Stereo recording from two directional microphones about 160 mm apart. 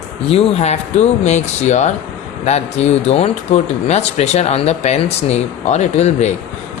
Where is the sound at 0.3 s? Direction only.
40° left (ahead or behind).